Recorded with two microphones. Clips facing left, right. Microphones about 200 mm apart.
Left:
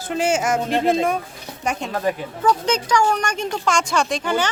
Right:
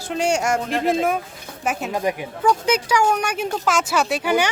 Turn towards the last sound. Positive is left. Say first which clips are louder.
# right 2 dB
turn(degrees=-10)  # may be behind; listen again after turning